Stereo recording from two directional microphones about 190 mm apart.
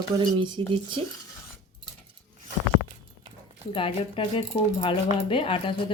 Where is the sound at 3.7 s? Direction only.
30° left (ahead or behind).